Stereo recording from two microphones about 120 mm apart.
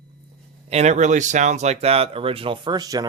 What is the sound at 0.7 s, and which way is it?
Speech, 70° right (ahead or behind).